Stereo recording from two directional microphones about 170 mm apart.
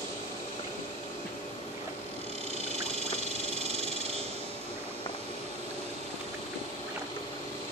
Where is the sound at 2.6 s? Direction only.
40° right (ahead or behind).